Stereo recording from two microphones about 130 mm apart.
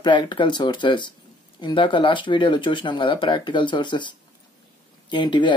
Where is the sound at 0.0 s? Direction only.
35° left (ahead or behind).